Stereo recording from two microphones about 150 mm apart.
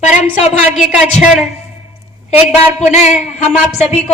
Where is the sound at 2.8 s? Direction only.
50° left (ahead or behind).